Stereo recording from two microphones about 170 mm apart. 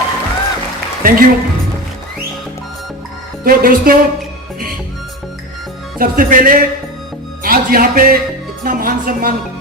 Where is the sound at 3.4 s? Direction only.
55° right (ahead or behind).